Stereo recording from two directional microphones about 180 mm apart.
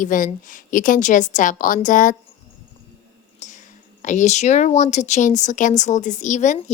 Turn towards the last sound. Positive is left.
turn(degrees=40)  # may be behind; listen again after turning